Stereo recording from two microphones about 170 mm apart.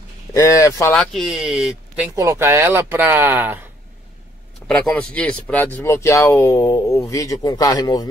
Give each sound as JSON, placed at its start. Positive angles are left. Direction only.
{"t": 0.3, "sound": "speech", "side_deg": 20}
{"t": 0.9, "sound": "speech", "side_deg": 0}
{"t": 2.1, "sound": "speech", "side_deg": -15}
{"t": 4.6, "sound": "speech", "side_deg": 10}